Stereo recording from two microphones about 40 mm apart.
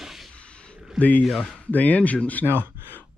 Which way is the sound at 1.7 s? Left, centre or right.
Left.